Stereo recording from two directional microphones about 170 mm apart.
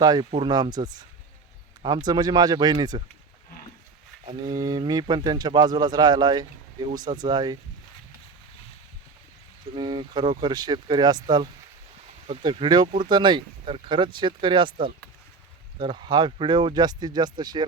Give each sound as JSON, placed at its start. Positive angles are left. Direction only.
{"t": 0.0, "sound": "speech", "side_deg": -25}
{"t": 4.4, "sound": "speech", "side_deg": -25}
{"t": 9.7, "sound": "speech", "side_deg": -25}